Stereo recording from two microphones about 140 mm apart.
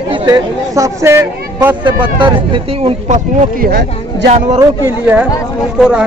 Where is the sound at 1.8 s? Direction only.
35° right (ahead or behind).